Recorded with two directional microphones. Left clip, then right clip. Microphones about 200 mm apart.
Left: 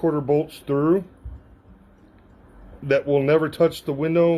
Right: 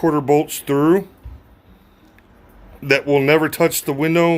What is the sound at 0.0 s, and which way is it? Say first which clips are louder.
Speech: right 5 dB; 40° right (ahead or behind).